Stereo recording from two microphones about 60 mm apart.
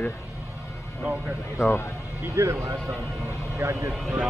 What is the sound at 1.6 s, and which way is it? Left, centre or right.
Speech, left.